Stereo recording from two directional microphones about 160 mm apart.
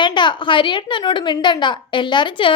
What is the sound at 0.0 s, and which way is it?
A woman's voice, 30° left (ahead or behind).